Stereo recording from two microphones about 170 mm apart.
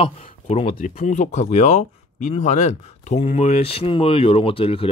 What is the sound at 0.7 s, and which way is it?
Speech, 50° left (ahead or behind).